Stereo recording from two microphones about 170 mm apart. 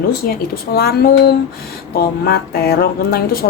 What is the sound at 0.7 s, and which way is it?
A woman's voice, 65° left (ahead or behind).